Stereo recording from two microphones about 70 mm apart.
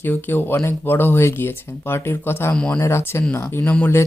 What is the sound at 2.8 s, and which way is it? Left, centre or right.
Speech, left.